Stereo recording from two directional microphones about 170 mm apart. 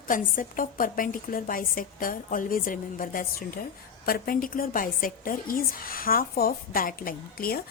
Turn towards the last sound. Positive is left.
turn(degrees=60)  # may be behind; listen again after turning